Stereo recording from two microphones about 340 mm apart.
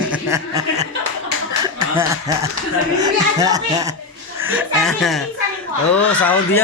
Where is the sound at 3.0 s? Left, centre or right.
Centre.